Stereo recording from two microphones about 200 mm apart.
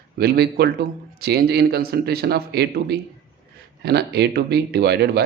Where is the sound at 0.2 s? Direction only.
50° right (ahead or behind).